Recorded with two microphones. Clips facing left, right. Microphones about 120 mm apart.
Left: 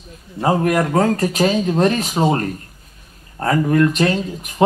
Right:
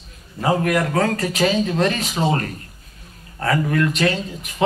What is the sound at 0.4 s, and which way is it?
Speech, 30° left (ahead or behind).